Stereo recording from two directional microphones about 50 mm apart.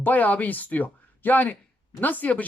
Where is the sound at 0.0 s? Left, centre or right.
Left.